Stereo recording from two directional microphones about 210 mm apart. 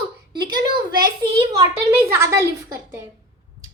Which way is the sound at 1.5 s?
15° right (ahead or behind).